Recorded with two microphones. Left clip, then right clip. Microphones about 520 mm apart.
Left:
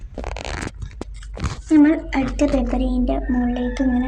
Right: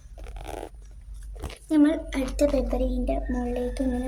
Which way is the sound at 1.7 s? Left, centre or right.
Right.